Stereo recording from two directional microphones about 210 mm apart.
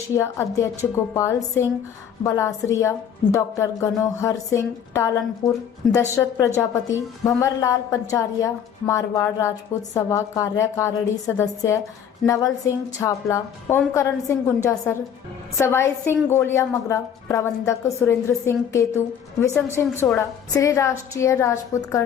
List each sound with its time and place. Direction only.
0.2 s a woman's voice: 15° left (ahead or behind)
5.4 s speech: 35° left (ahead or behind)
6.0 s a woman's voice: 15° left (ahead or behind)